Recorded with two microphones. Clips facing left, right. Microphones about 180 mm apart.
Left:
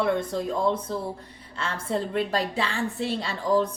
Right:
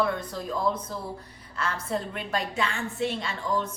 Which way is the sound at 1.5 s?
30° left (ahead or behind).